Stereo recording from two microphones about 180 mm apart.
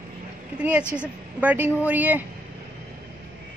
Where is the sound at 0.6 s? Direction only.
5° right (ahead or behind).